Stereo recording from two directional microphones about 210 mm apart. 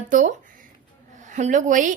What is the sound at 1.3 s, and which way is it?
Speech, 35° right (ahead or behind).